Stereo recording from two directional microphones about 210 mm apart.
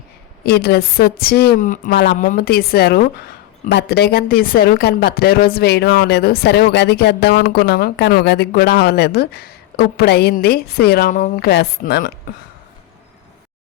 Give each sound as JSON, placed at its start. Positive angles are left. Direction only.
{"t": 0.4, "sound": "speech", "side_deg": 50}